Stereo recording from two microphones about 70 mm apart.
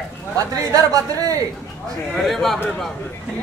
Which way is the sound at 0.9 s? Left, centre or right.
Right.